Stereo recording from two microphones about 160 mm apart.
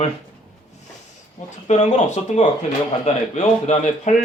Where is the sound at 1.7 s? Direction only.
45° left (ahead or behind).